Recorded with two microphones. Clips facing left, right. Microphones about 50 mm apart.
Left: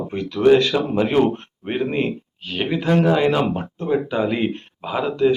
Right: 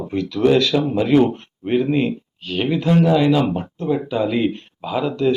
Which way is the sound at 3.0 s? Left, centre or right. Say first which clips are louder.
Right 2 dB; left.